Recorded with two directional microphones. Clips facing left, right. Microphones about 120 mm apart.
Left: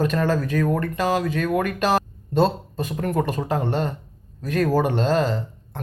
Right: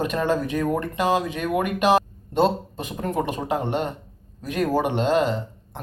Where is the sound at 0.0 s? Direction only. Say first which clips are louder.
Left 1 dB; 20° right (ahead or behind).